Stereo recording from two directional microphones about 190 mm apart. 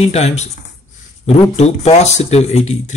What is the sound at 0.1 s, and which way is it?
Speech, 35° left (ahead or behind).